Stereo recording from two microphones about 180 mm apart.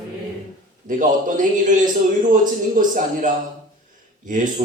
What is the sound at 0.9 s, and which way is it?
A man's voice, 45° right (ahead or behind).